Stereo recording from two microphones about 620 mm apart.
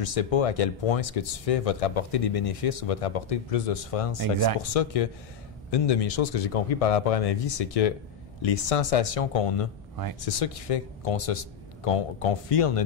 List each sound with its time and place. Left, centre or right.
0.0 s speech: left
4.2 s speech: right
4.6 s speech: left